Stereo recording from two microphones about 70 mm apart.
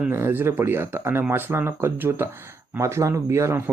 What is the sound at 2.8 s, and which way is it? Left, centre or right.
Speech, right.